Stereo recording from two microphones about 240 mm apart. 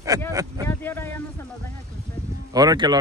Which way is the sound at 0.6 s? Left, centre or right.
Centre.